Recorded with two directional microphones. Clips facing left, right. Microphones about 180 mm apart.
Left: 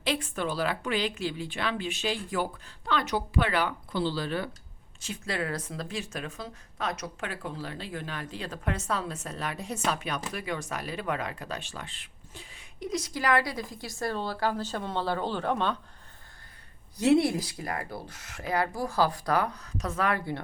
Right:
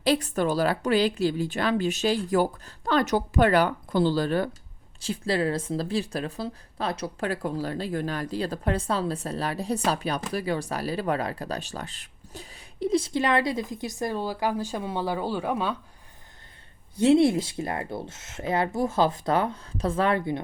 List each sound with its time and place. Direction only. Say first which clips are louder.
0.0 s speech: right 7 dB; 40° right (ahead or behind)
4.9 s speech: right 7 dB; 30° right (ahead or behind); by 15.8 s 10° right (ahead or behind)
17.0 s speech: right 4 dB; 25° right (ahead or behind)